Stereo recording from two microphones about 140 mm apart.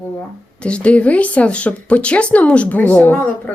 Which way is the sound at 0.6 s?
10° left (ahead or behind).